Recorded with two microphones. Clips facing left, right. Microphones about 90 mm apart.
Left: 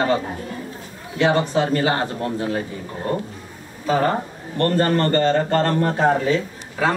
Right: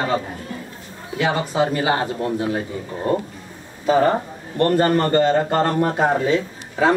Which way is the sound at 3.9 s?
20° right (ahead or behind).